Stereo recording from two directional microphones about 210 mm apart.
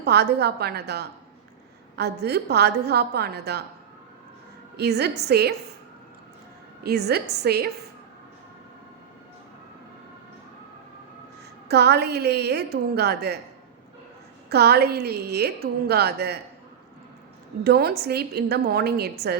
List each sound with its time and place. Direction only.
0.0 s a woman's voice: 50° right (ahead or behind)
4.8 s a woman's voice: 50° right (ahead or behind)
6.8 s a woman's voice: 50° right (ahead or behind)
11.7 s a woman's voice: 50° right (ahead or behind)
14.5 s a woman's voice: 50° right (ahead or behind)
17.6 s a woman's voice: 50° right (ahead or behind)